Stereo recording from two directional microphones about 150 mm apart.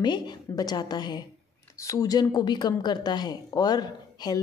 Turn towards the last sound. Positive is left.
turn(degrees=25)  # may be behind; listen again after turning